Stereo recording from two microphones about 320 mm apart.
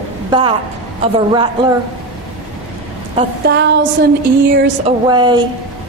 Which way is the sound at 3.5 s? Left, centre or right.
Right.